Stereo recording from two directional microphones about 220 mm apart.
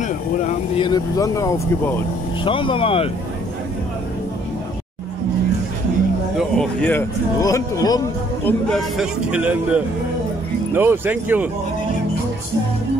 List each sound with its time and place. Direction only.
0.0 s speech: 35° left (ahead or behind)
0.8 s speech: 15° left (ahead or behind)
6.3 s speech: 5° left (ahead or behind)
8.5 s a man's voice: centre (ahead or behind)